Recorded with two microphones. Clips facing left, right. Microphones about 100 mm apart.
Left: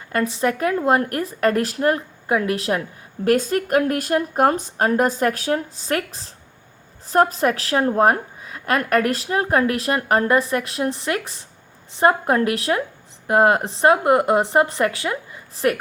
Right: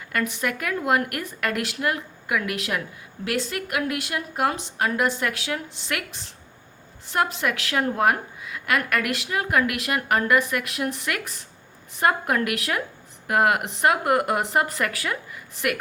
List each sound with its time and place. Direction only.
0.1 s a woman's voice: 30° left (ahead or behind)